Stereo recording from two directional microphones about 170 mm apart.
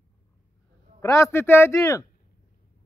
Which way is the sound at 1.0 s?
15° left (ahead or behind).